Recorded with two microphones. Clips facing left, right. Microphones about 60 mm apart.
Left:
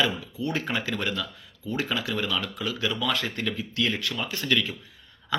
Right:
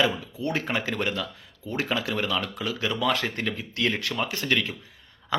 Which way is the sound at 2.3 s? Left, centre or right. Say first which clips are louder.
Right 1 dB; right.